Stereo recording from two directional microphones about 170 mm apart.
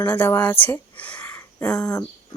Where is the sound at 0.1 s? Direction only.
10° left (ahead or behind).